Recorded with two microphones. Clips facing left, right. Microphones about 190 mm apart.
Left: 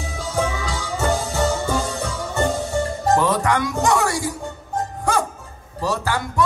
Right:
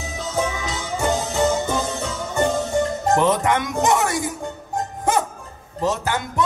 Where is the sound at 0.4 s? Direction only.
20° right (ahead or behind).